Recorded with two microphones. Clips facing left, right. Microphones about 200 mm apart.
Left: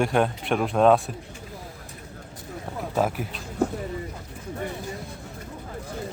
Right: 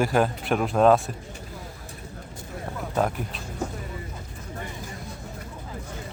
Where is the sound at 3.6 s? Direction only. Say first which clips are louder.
Left 7 dB; 60° left (ahead or behind).